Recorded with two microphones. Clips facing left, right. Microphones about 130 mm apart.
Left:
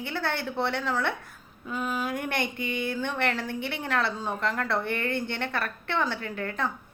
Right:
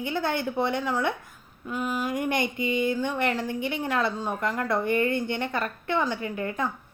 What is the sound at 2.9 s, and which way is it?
Speech, 10° right (ahead or behind).